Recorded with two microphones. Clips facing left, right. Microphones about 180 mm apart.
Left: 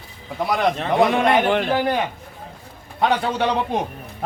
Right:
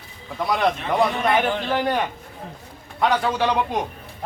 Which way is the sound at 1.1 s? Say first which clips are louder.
Left 4 dB; 70° left (ahead or behind).